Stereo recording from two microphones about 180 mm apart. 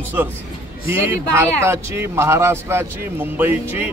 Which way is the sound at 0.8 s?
15° right (ahead or behind).